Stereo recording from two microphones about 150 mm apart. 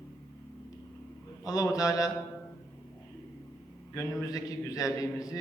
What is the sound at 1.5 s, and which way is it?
Speech, 25° left (ahead or behind).